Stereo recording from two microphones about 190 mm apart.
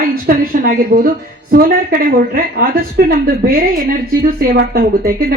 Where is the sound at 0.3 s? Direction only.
50° right (ahead or behind).